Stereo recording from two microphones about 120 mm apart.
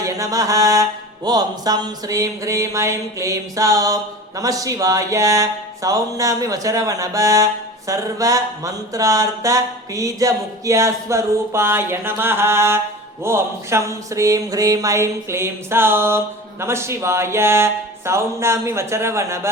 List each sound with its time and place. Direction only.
0.0 s mantra: 30° right (ahead or behind)